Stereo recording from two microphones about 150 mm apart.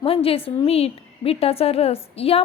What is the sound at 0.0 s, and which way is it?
A woman's voice, 40° left (ahead or behind).